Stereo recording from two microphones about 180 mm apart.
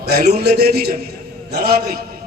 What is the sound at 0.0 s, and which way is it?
A man's voice, 60° right (ahead or behind).